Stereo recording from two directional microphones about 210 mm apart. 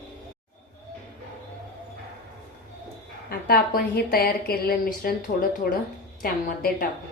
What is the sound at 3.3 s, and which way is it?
A woman's voice, 45° left (ahead or behind).